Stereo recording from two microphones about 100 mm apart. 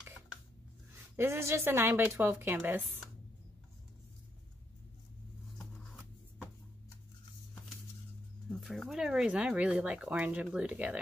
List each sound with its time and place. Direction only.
1.1 s speech: 25° right (ahead or behind)
8.5 s speech: centre (ahead or behind)